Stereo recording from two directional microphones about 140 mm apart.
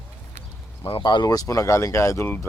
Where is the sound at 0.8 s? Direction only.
35° left (ahead or behind); by 2.4 s 15° left (ahead or behind).